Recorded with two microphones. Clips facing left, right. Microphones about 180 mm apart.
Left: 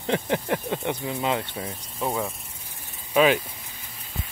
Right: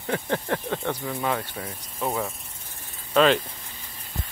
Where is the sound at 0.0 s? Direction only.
20° left (ahead or behind).